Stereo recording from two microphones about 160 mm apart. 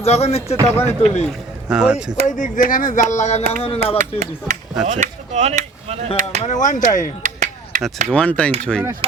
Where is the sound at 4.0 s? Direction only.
50° right (ahead or behind).